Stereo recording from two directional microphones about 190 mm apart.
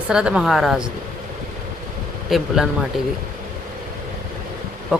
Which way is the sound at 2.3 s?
Centre (ahead or behind).